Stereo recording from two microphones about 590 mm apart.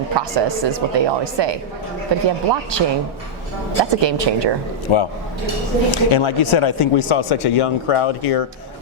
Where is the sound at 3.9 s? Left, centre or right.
Right.